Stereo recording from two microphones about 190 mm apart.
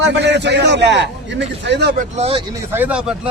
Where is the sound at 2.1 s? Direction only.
30° right (ahead or behind).